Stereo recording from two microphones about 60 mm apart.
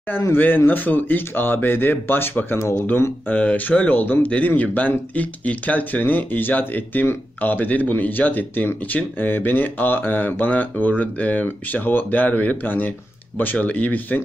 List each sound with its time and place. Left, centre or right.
0.3 s speech: left
3.2 s speech: left